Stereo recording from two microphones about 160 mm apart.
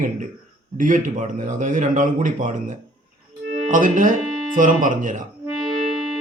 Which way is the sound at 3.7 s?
55° right (ahead or behind).